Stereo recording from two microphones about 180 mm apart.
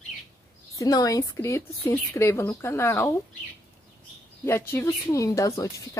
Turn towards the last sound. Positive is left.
turn(degrees=20)  # may be behind; listen again after turning